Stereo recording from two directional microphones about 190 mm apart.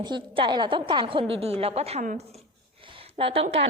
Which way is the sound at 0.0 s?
25° right (ahead or behind).